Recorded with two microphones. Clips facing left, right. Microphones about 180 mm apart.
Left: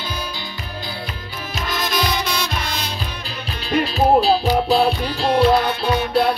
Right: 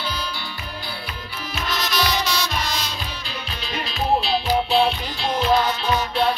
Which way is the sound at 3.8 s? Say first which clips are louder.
Left 6 dB; 35° left (ahead or behind).